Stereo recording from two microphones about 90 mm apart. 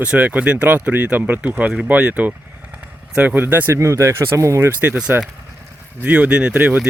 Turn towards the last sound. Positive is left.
turn(degrees=-20)  # may be behind; listen again after turning